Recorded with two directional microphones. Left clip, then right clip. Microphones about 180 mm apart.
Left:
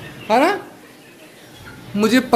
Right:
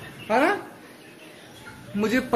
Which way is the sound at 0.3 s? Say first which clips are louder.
Left 6 dB; 25° left (ahead or behind).